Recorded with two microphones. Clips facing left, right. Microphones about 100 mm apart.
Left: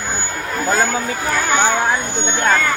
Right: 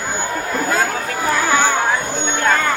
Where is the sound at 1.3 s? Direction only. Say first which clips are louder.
Right 2 dB; 40° right (ahead or behind).